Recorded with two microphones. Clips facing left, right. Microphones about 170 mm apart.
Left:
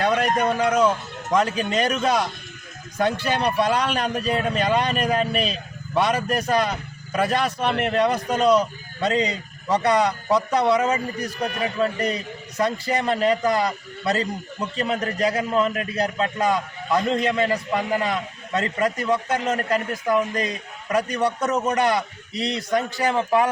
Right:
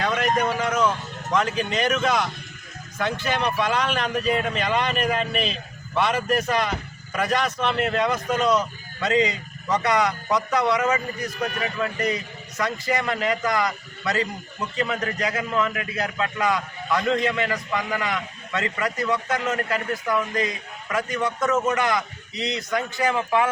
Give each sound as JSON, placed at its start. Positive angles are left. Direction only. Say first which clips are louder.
{"t": 0.0, "sound": "a man's voice", "louder": "left 2 dB", "side_deg": 35}